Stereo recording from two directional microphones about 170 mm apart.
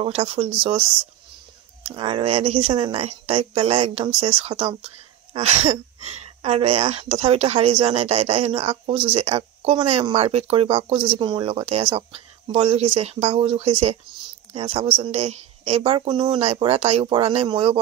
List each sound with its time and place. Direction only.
0.0 s speech: 35° right (ahead or behind)
1.9 s speech: 30° right (ahead or behind)